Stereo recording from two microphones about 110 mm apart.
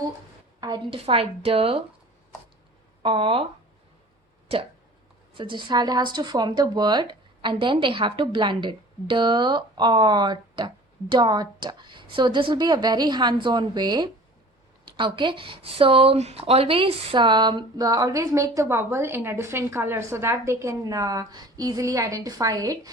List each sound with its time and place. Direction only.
0.9 s speech: 55° right (ahead or behind)
3.0 s speech: 50° right (ahead or behind)
5.3 s speech: 50° right (ahead or behind); by 16.4 s 75° right (ahead or behind)
16.4 s speech: 60° right (ahead or behind); by 22.9 s 35° right (ahead or behind)